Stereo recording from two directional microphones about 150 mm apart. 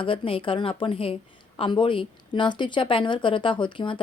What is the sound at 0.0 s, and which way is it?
Speech, 35° left (ahead or behind).